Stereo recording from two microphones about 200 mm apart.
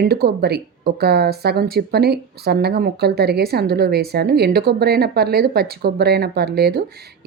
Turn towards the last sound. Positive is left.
turn(degrees=-50)  # may be behind; listen again after turning